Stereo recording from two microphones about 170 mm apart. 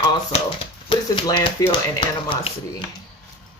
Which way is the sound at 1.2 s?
25° left (ahead or behind).